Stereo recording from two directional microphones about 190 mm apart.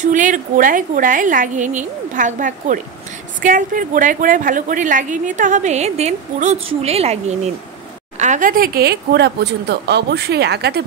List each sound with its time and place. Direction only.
0.0 s a woman's voice: 40° right (ahead or behind); by 10.8 s 60° right (ahead or behind)